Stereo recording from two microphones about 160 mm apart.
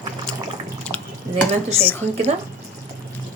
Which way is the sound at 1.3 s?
45° right (ahead or behind).